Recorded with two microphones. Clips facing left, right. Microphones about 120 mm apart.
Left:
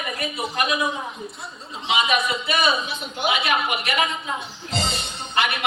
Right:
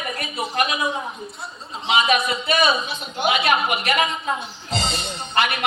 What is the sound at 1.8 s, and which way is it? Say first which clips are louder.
A woman's voice: right 2 dB; 50° right (ahead or behind).